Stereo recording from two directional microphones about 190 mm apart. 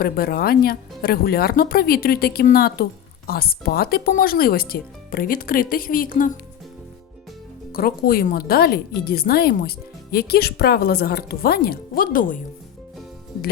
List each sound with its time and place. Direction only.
0.0 s a woman's voice: 50° left (ahead or behind)
7.7 s a woman's voice: 50° left (ahead or behind)